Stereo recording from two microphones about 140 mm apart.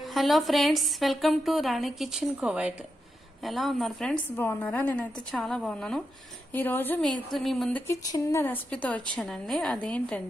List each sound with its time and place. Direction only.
0.1 s a woman's voice: centre (ahead or behind)
6.5 s a woman's voice: 15° left (ahead or behind)
7.0 s a woman's voice: 5° left (ahead or behind)
7.7 s a woman's voice: 15° left (ahead or behind)